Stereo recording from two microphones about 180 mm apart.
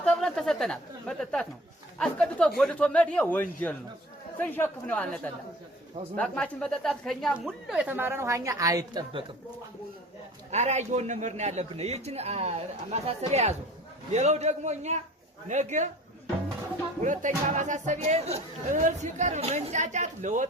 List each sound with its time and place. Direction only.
0.0 s a woman's voice: 5° left (ahead or behind); by 9.2 s 20° right (ahead or behind)
10.5 s a man's voice: 40° right (ahead or behind)
17.0 s speech: 45° right (ahead or behind)